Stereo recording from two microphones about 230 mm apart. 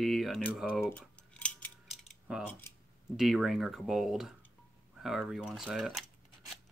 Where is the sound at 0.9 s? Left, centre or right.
Centre.